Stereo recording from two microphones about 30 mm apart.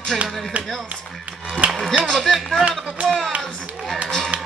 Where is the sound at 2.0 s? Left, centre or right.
Centre.